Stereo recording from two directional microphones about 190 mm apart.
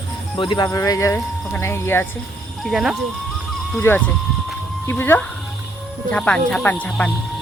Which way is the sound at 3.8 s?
10° left (ahead or behind).